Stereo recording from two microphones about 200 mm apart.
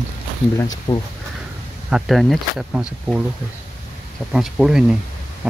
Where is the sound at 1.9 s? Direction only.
Centre (ahead or behind).